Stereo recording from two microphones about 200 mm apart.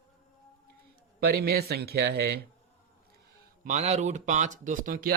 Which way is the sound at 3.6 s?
35° right (ahead or behind).